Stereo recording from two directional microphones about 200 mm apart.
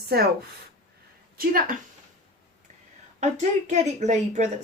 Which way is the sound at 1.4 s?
45° right (ahead or behind).